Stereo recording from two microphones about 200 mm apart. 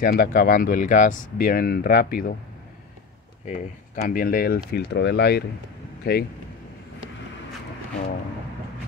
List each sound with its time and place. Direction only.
0.0 s speech: 45° left (ahead or behind)
3.4 s speech: 40° left (ahead or behind)